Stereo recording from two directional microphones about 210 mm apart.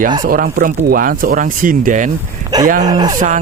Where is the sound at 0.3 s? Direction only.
45° right (ahead or behind).